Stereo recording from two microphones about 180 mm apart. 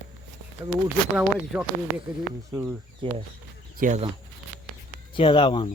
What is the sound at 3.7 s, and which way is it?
Speech, 45° right (ahead or behind).